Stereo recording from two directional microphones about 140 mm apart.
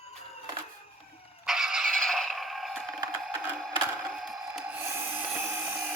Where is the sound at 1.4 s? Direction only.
Centre (ahead or behind).